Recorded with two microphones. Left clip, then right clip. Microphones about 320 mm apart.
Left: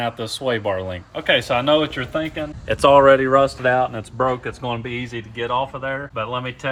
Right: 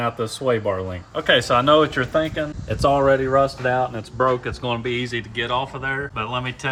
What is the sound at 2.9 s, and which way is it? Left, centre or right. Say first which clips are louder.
Speech: left 5 dB; left.